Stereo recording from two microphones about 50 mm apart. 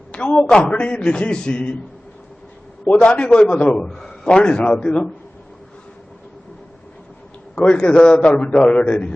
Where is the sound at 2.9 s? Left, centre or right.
Left.